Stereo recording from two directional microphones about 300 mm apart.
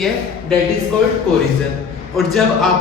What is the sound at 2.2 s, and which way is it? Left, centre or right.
Speech, centre.